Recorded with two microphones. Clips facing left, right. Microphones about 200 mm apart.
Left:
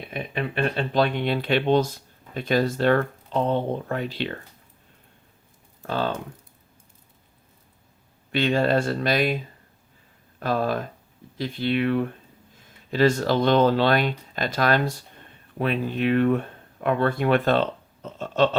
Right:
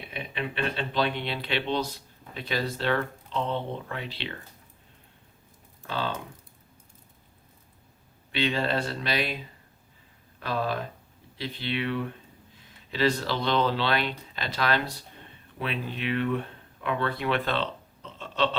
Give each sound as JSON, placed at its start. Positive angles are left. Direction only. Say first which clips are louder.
{"t": 0.1, "sound": "speech", "louder": "left 5 dB", "side_deg": 45}
{"t": 5.8, "sound": "speech", "louder": "left 5 dB", "side_deg": 45}
{"t": 8.3, "sound": "speech", "louder": "left 6 dB", "side_deg": 45}
{"t": 10.4, "sound": "speech", "louder": "left 5 dB", "side_deg": 45}